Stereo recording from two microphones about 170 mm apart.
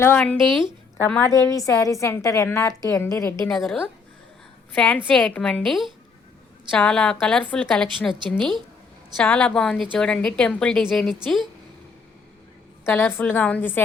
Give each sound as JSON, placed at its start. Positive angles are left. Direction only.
{"t": 0.0, "sound": "a woman's voice", "side_deg": 10}
{"t": 1.0, "sound": "a woman's voice", "side_deg": 10}
{"t": 3.5, "sound": "a woman's voice", "side_deg": 0}
{"t": 12.8, "sound": "a woman's voice", "side_deg": 10}